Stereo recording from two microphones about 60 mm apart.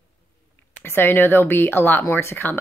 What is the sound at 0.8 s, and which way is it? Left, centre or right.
A woman's voice, left.